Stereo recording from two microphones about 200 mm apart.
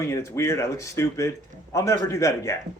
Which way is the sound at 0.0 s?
15° left (ahead or behind).